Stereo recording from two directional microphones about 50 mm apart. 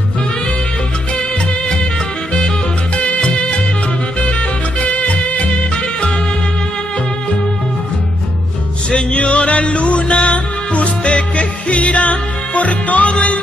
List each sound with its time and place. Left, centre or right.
3.0 s music: left
9.1 s music: left